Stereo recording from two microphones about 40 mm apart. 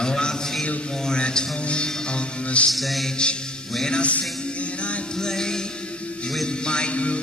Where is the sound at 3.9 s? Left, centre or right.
Left.